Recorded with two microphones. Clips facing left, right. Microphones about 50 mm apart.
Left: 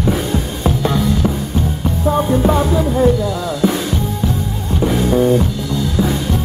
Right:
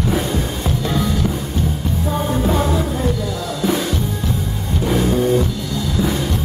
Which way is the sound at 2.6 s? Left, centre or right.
Centre.